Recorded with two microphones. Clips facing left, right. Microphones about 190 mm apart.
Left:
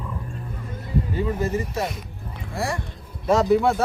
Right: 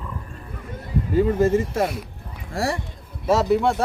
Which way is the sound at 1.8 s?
5° right (ahead or behind).